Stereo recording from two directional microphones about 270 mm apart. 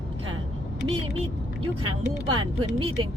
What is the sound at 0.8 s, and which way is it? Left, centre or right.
Speech, right.